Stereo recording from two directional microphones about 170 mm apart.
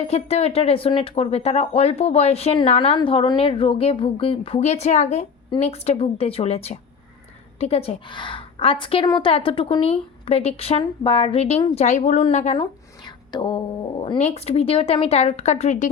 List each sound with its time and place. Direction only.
0.1 s speech: 35° left (ahead or behind)
13.1 s whispering: 25° left (ahead or behind)
14.0 s a sound: 30° left (ahead or behind)
14.3 s speech: 40° left (ahead or behind)